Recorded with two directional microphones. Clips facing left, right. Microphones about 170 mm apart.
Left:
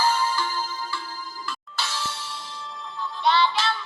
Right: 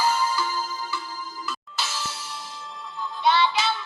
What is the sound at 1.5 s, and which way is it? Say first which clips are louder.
Music: left 1 dB; centre (ahead or behind).